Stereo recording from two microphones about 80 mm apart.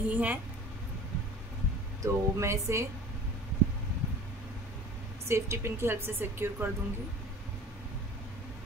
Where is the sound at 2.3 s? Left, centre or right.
Right.